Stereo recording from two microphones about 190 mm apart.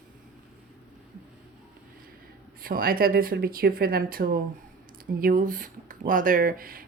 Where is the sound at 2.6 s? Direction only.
50° right (ahead or behind).